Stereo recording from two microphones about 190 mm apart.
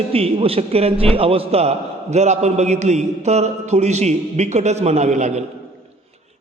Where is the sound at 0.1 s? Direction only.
30° right (ahead or behind).